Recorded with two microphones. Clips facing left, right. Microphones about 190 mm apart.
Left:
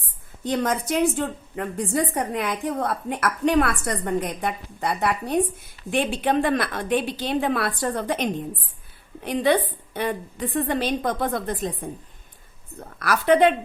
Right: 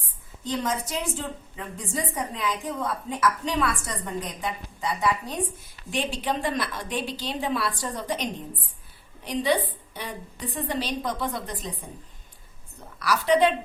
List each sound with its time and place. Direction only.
0.4 s a woman's voice: 60° left (ahead or behind)
13.0 s a woman's voice: 55° left (ahead or behind)